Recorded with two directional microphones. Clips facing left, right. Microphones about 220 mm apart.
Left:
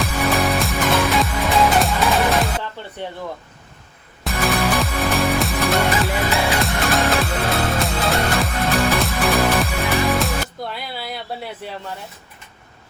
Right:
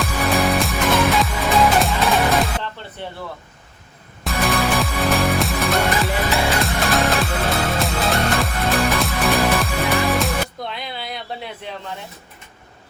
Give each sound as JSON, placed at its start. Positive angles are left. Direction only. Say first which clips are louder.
{"t": 0.0, "sound": "music", "louder": "even", "side_deg": 0}
{"t": 4.2, "sound": "music", "louder": "even", "side_deg": 0}